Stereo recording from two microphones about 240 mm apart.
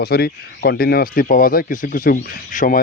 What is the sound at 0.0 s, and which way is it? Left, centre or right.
Speech, left.